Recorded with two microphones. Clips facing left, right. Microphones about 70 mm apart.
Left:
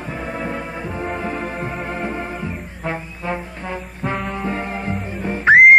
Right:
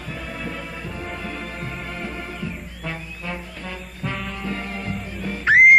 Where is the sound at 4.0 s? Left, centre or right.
Left.